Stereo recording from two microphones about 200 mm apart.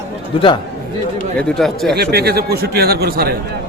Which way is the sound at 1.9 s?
50° right (ahead or behind).